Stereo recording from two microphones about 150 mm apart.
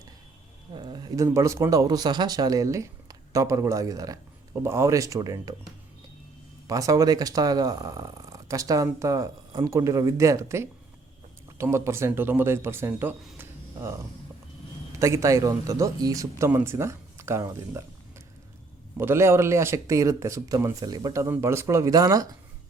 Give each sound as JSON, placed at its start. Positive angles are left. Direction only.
{"t": 0.8, "sound": "speech", "side_deg": -30}
{"t": 6.7, "sound": "speech", "side_deg": -20}
{"t": 13.4, "sound": "a sound", "side_deg": -20}
{"t": 14.9, "sound": "speech", "side_deg": -20}
{"t": 18.9, "sound": "speech", "side_deg": -15}